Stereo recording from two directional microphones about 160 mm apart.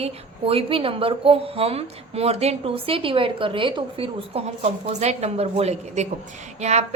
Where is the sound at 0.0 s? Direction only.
35° right (ahead or behind).